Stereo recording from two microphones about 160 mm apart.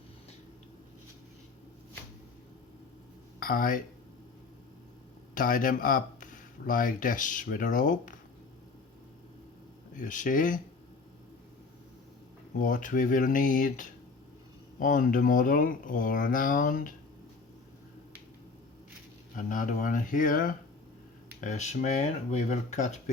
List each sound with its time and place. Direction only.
3.4 s speech: 60° left (ahead or behind)
5.3 s speech: 60° left (ahead or behind)
10.0 s speech: 55° left (ahead or behind)
12.5 s speech: 55° left (ahead or behind)
19.4 s speech: 55° left (ahead or behind)
21.4 s speech: 45° left (ahead or behind)